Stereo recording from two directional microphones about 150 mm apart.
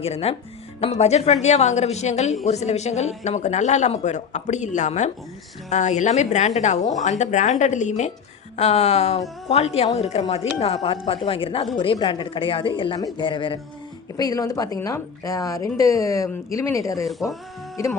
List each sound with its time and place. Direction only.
0.0 s a woman's voice: 40° left (ahead or behind); by 17.1 s 20° left (ahead or behind)